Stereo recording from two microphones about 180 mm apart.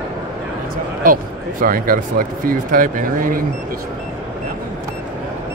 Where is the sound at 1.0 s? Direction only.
50° right (ahead or behind).